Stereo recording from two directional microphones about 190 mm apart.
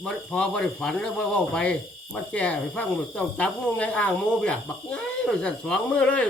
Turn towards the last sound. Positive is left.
turn(degrees=5)  # may be behind; listen again after turning